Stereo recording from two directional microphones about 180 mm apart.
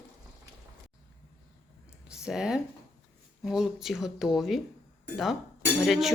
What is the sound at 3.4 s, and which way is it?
Speech, centre (ahead or behind).